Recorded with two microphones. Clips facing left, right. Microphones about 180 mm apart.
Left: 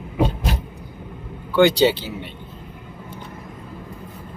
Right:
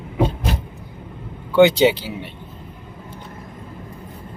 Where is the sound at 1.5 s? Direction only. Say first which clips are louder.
Right 2 dB; 20° right (ahead or behind).